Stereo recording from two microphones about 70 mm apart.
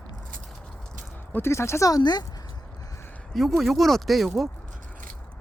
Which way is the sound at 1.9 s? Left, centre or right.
Left.